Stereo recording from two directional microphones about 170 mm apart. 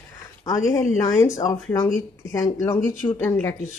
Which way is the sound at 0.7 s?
15° left (ahead or behind).